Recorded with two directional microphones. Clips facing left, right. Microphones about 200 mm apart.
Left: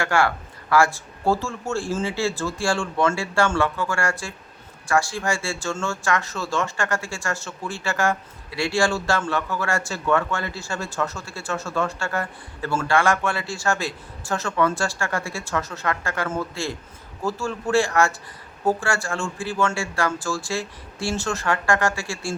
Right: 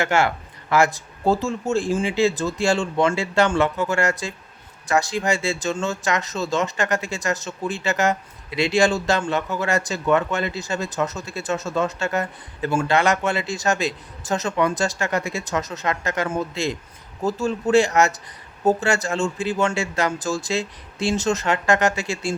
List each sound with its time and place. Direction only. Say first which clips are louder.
0.0 s speech: right 1 dB; 20° right (ahead or behind)